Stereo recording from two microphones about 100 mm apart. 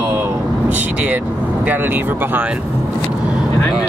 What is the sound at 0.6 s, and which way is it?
Speech, 15° right (ahead or behind).